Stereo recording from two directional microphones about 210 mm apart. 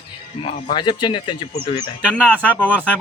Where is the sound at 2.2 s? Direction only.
5° left (ahead or behind).